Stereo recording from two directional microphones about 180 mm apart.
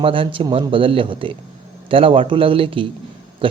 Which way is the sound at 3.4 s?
30° right (ahead or behind).